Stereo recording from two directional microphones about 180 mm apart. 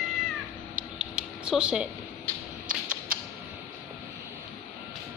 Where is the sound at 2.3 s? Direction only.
10° left (ahead or behind).